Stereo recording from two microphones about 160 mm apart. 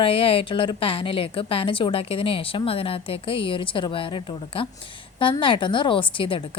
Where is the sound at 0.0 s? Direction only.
35° left (ahead or behind).